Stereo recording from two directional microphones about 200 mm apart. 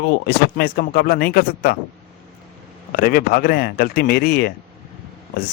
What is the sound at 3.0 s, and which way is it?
A man's voice, 45° left (ahead or behind).